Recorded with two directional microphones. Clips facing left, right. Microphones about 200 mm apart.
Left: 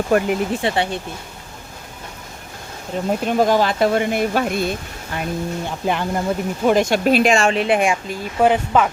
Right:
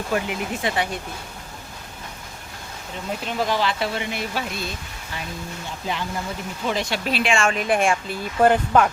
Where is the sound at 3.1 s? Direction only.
45° left (ahead or behind).